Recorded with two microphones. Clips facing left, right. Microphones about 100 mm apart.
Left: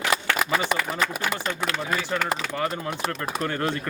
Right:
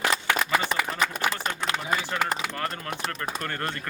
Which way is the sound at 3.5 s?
10° left (ahead or behind).